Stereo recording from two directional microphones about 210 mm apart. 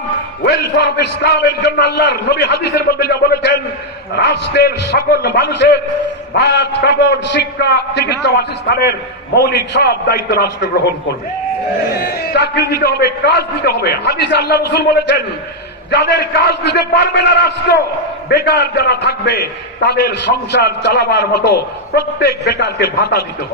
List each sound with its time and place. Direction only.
0.4 s a man's voice: 50° left (ahead or behind)
12.3 s a man's voice: 50° left (ahead or behind)